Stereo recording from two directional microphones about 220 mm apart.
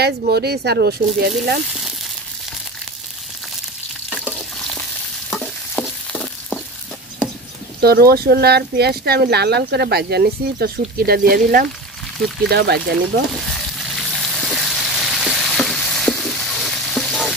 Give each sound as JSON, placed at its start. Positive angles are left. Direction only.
{"t": 0.0, "sound": "speech", "side_deg": -45}
{"t": 4.1, "sound": "frying", "side_deg": 5}
{"t": 5.3, "sound": "stir", "side_deg": 5}
{"t": 7.8, "sound": "speech", "side_deg": -45}
{"t": 13.4, "sound": "frying", "side_deg": 0}